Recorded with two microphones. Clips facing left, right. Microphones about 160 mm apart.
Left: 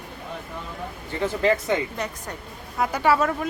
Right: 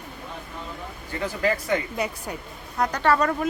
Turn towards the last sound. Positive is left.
turn(degrees=0)  # may be behind; listen again after turning